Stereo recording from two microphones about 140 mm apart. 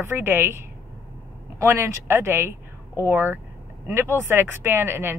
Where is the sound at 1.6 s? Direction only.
15° right (ahead or behind).